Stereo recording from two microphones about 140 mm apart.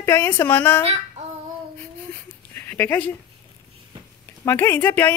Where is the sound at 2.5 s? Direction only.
15° left (ahead or behind).